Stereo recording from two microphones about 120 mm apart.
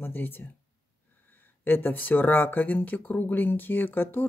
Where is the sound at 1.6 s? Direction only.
15° left (ahead or behind).